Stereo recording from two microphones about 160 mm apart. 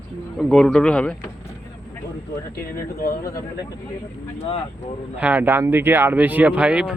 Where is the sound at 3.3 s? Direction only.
20° left (ahead or behind).